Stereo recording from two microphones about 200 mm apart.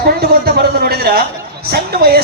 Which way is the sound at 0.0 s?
50° right (ahead or behind).